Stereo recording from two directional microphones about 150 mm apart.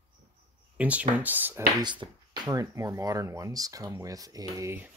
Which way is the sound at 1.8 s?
30° right (ahead or behind).